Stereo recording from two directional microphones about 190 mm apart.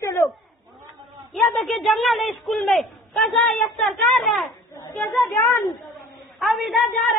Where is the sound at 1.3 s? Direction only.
Centre (ahead or behind).